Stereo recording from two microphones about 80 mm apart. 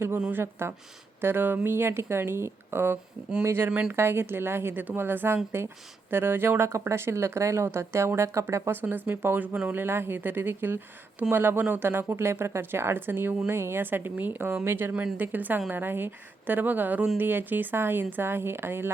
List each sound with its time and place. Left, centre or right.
0.3 s speech: right
3.7 s speech: centre
3.9 s speech: right
8.8 s speech: right